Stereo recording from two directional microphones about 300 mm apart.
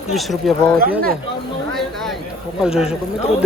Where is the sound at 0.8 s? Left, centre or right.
Right.